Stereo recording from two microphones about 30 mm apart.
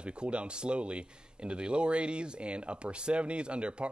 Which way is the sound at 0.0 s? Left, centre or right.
Right.